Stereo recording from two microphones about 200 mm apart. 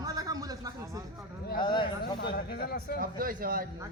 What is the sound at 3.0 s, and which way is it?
Speech, 45° right (ahead or behind).